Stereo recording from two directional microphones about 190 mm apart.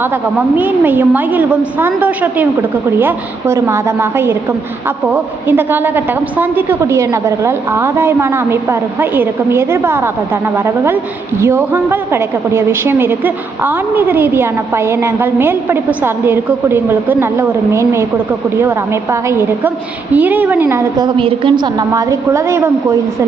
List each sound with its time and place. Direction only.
0.0 s a woman's voice: 10° right (ahead or behind)
19.1 s a woman's voice: 15° right (ahead or behind)
21.2 s a woman's voice: 25° right (ahead or behind)